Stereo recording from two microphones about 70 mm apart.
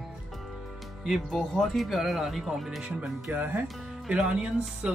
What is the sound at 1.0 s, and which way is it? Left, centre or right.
Speech, centre.